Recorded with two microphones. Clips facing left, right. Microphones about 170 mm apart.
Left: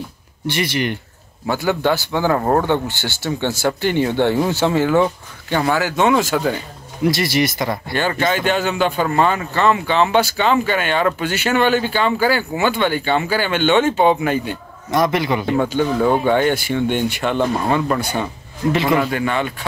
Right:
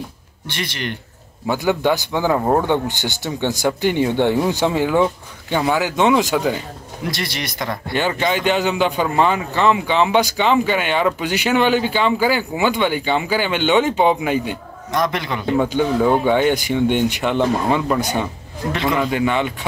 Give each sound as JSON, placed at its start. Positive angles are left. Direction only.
{"t": 0.5, "sound": "speech", "side_deg": 10}
{"t": 1.5, "sound": "speech", "side_deg": -15}
{"t": 7.1, "sound": "speech", "side_deg": 5}
{"t": 7.9, "sound": "speech", "side_deg": -15}
{"t": 14.9, "sound": "speech", "side_deg": 5}
{"t": 16.1, "sound": "speech", "side_deg": -15}
{"t": 18.7, "sound": "speech", "side_deg": 5}
{"t": 19.0, "sound": "speech", "side_deg": -15}